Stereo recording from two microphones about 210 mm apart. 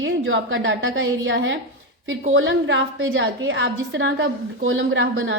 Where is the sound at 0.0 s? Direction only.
65° right (ahead or behind).